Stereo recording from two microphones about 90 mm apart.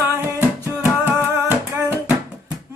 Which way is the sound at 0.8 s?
20° right (ahead or behind).